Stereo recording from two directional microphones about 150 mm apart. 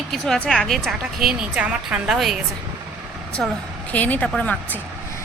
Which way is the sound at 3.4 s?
5° left (ahead or behind).